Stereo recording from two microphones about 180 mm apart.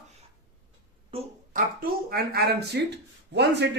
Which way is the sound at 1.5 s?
55° right (ahead or behind).